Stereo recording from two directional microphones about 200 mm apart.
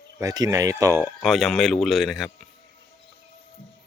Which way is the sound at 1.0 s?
Centre (ahead or behind).